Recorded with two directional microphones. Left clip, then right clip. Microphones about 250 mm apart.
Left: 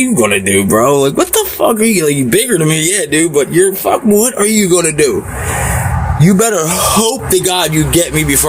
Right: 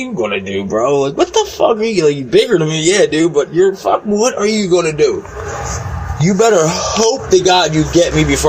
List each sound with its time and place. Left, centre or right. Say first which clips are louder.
0.2 s speech: left 4 dB; left
6.2 s speech: right 2 dB; left